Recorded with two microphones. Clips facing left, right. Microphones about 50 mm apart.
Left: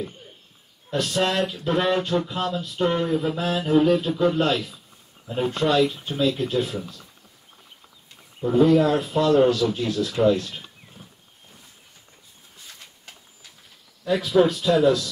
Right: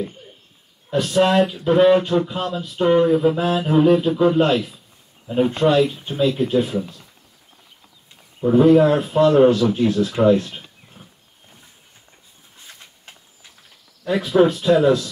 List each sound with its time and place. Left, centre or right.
0.8 s speech: centre; by 7.0 s right
8.5 s speech: right
14.0 s speech: right